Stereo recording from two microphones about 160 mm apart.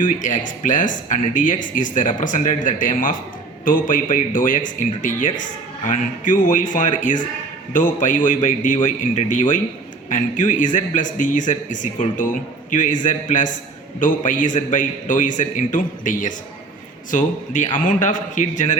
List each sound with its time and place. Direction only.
0.0 s speech: 55° left (ahead or behind)